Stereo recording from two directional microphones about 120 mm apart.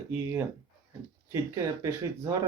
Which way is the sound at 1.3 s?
25° right (ahead or behind).